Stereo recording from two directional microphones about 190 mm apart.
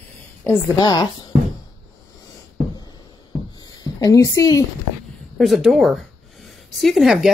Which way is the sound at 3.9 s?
20° left (ahead or behind).